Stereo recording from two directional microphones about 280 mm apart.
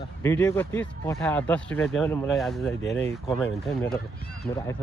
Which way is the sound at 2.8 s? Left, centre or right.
Left.